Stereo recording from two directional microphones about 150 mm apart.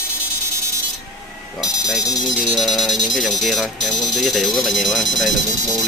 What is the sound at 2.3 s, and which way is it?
Speech, centre (ahead or behind).